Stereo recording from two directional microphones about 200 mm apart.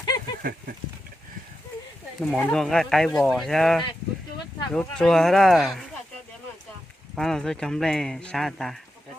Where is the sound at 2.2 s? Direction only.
5° left (ahead or behind).